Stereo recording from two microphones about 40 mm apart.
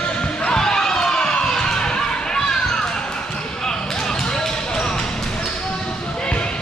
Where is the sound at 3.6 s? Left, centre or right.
Centre.